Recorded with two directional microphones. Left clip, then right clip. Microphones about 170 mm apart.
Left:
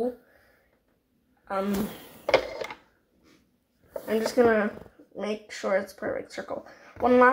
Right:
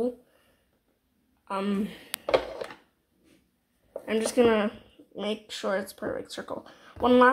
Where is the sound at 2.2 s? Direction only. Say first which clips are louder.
Left 2 dB; 5° left (ahead or behind).